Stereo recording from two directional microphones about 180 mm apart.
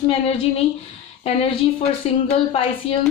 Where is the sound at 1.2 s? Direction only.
30° left (ahead or behind).